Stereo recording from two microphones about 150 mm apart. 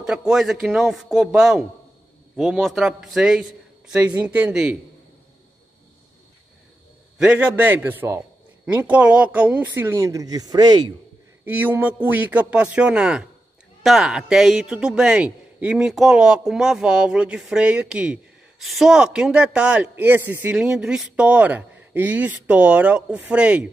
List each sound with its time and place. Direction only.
0.0 s a man's voice: 5° right (ahead or behind)
7.2 s a man's voice: 10° right (ahead or behind); by 10.9 s 25° right (ahead or behind)
11.4 s a man's voice: 10° right (ahead or behind)